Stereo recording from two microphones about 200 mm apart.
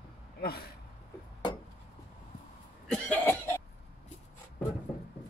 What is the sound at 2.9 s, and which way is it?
Cough, 5° left (ahead or behind).